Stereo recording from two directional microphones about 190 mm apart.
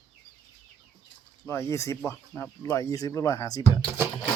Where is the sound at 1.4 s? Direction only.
15° left (ahead or behind).